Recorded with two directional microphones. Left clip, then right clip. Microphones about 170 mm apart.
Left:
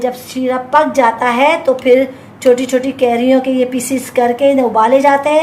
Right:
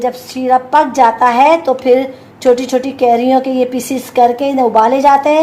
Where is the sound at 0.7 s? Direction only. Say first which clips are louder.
Left 2 dB; 35° right (ahead or behind).